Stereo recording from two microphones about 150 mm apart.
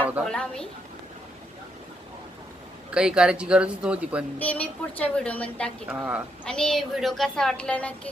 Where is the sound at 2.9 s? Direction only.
5° right (ahead or behind).